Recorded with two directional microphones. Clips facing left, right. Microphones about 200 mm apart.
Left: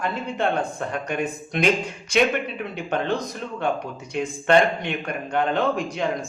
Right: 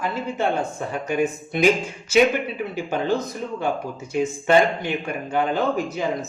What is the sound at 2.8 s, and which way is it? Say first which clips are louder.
A man's voice: right 1 dB; 5° right (ahead or behind).